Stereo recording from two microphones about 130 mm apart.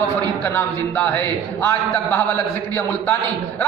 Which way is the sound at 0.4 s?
15° left (ahead or behind).